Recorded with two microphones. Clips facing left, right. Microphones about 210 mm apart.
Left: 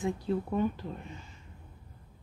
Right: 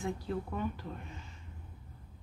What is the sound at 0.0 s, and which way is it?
Speech, 25° left (ahead or behind).